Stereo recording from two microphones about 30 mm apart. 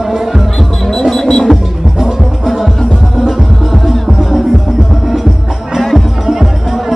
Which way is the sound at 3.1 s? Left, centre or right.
Centre.